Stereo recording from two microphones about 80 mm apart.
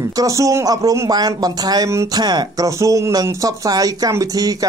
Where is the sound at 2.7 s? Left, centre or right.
Right.